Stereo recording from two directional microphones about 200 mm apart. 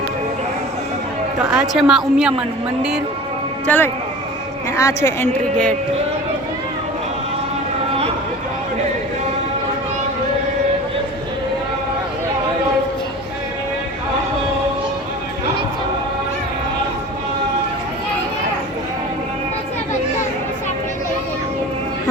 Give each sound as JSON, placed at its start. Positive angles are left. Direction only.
{"t": 1.4, "sound": "a woman's voice", "side_deg": -5}
{"t": 3.7, "sound": "a woman's voice", "side_deg": 10}